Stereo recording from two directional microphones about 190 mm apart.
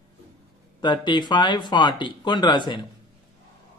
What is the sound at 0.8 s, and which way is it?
Speech, 25° left (ahead or behind).